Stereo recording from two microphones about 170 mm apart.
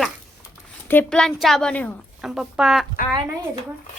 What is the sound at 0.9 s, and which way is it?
A woman's voice, 10° left (ahead or behind).